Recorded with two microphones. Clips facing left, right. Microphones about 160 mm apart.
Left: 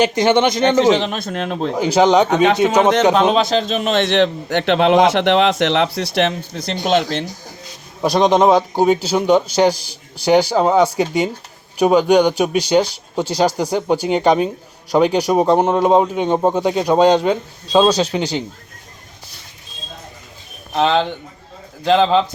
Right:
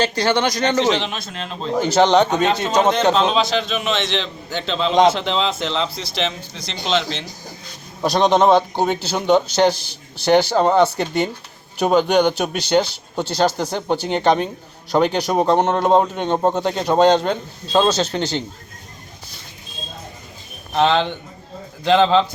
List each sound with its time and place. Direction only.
0.0 s speech: 20° left (ahead or behind)
0.8 s speech: 45° left (ahead or behind)
1.8 s speech: 5° left (ahead or behind)
2.3 s a man's voice: 70° left (ahead or behind)
3.2 s a man's voice: 50° left (ahead or behind)
6.6 s a man's voice: 55° left (ahead or behind)
8.0 s speech: 10° left (ahead or behind)
20.7 s speech: 5° left (ahead or behind)